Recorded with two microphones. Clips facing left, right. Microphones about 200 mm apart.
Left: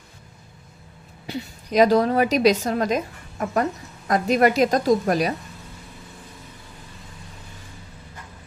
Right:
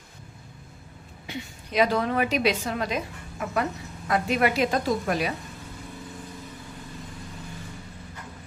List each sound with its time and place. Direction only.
1.2 s a woman's voice: 40° left (ahead or behind)